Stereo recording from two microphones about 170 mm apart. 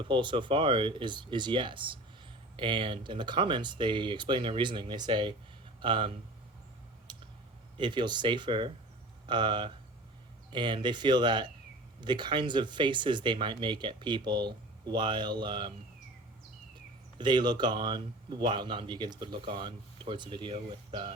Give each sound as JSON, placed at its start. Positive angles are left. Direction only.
{"t": 0.1, "sound": "a man's voice", "side_deg": -30}
{"t": 7.1, "sound": "a sound", "side_deg": -25}
{"t": 7.8, "sound": "a man's voice", "side_deg": -25}
{"t": 17.2, "sound": "a man's voice", "side_deg": -25}